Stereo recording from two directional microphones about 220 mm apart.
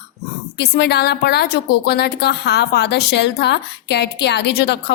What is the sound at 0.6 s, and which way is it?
A woman's voice, 50° left (ahead or behind).